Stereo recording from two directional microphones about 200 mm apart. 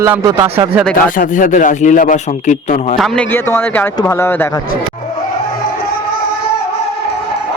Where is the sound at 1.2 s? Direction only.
40° left (ahead or behind).